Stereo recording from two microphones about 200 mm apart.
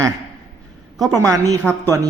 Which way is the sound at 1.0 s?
Centre (ahead or behind).